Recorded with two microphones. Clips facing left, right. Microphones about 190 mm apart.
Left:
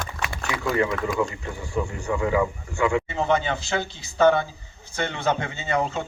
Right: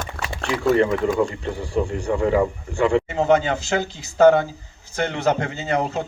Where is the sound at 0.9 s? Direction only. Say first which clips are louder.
Right 5 dB; 30° right (ahead or behind).